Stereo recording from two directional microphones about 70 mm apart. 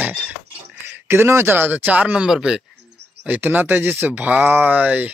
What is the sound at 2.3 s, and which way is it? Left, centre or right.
Speech, centre.